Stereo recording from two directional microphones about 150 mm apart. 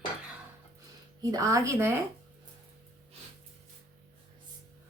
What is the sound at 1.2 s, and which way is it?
Speech, 25° right (ahead or behind).